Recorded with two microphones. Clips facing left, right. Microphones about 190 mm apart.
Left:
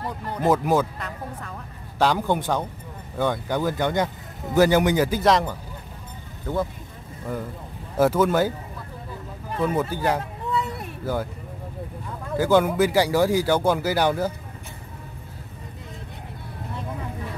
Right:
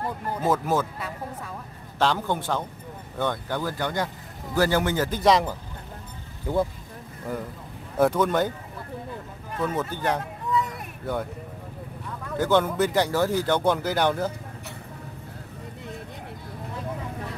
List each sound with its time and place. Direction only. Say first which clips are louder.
0.4 s speech: left 4 dB; 15° left (ahead or behind)
0.9 s speech: even; 5° right (ahead or behind)
2.0 s speech: left 3 dB; 10° left (ahead or behind)
5.2 s speech: even; 5° right (ahead or behind)
7.3 s speech: left 1 dB; centre (ahead or behind)
9.6 s speech: left 4 dB; 10° left (ahead or behind)
12.4 s speech: left 3 dB; 10° left (ahead or behind)